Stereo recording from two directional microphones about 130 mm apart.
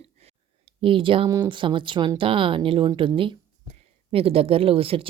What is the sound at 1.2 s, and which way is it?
A woman's voice, 30° right (ahead or behind).